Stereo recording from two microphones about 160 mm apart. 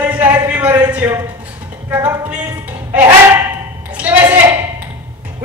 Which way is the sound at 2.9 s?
15° right (ahead or behind).